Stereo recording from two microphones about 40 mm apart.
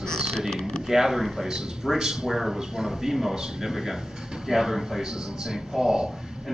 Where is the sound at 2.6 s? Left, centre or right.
Centre.